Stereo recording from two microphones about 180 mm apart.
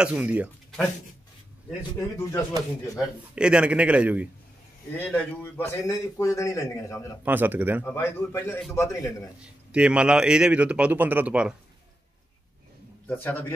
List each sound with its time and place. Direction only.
0.0 s a man's voice: 5° right (ahead or behind)
1.8 s a man's voice: 15° left (ahead or behind)
3.0 s a man's voice: 5° right (ahead or behind)
4.9 s a man's voice: 15° left (ahead or behind)
7.2 s a man's voice: 10° right (ahead or behind)
7.8 s a man's voice: 15° left (ahead or behind)
9.4 s speech: 5° right (ahead or behind)
13.0 s a man's voice: 10° left (ahead or behind)